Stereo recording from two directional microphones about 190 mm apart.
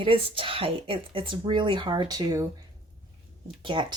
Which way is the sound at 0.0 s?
25° right (ahead or behind).